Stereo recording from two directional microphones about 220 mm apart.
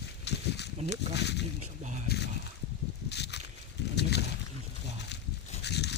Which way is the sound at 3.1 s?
50° left (ahead or behind).